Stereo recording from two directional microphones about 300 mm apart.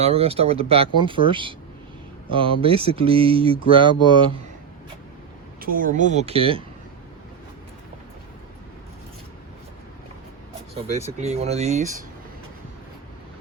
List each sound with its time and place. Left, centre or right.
0.0 s speech: centre
5.5 s speech: right
10.8 s speech: right